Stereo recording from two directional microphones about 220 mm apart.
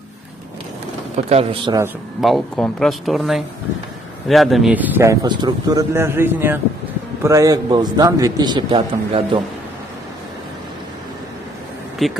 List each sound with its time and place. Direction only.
1.1 s a man's voice: 25° right (ahead or behind)
2.2 s a man's voice: centre (ahead or behind); by 9.4 s 20° right (ahead or behind)
12.0 s speech: centre (ahead or behind)